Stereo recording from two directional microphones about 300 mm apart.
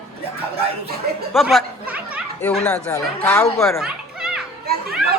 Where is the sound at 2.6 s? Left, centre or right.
Centre.